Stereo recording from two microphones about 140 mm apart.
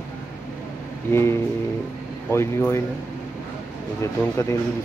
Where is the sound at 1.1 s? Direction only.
20° left (ahead or behind).